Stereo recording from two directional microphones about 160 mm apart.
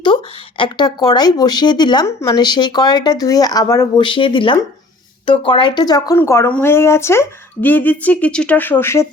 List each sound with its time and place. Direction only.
0.0 s speech: 30° left (ahead or behind); by 9.0 s 15° left (ahead or behind)